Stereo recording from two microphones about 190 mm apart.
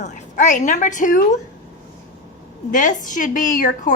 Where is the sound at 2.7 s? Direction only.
45° left (ahead or behind).